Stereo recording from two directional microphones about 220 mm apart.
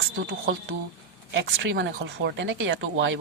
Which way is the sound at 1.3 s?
55° right (ahead or behind).